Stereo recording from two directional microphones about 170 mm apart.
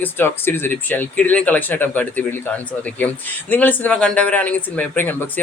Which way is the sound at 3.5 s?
10° left (ahead or behind).